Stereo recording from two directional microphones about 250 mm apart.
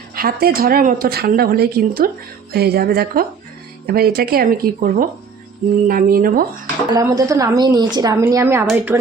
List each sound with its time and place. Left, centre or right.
0.1 s a woman's voice: right
6.9 s a woman's voice: centre